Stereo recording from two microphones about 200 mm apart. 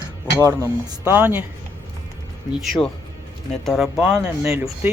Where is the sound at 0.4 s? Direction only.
10° right (ahead or behind).